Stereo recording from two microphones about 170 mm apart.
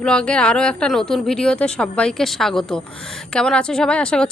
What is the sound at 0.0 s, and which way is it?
A woman's voice, 5° left (ahead or behind).